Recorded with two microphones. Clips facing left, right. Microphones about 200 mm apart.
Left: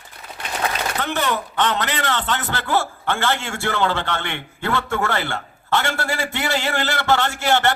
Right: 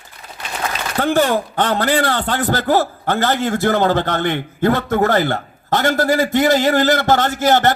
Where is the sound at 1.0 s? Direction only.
40° right (ahead or behind).